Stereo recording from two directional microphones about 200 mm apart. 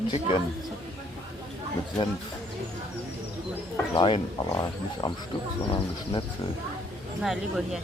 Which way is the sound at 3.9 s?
25° left (ahead or behind).